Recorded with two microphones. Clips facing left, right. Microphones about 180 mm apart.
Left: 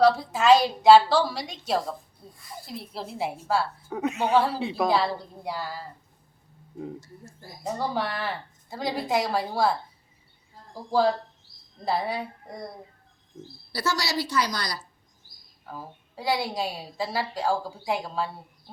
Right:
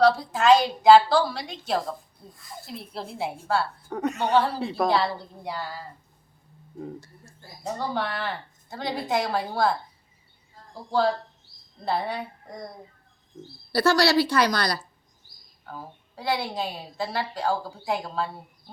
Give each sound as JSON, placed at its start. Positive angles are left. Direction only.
{"t": 0.0, "sound": "a woman's voice", "side_deg": 5}
{"t": 7.6, "sound": "a woman's voice", "side_deg": 10}
{"t": 11.9, "sound": "a woman's voice", "side_deg": 5}
{"t": 13.7, "sound": "speech", "side_deg": -65}
{"t": 15.6, "sound": "a woman's voice", "side_deg": 5}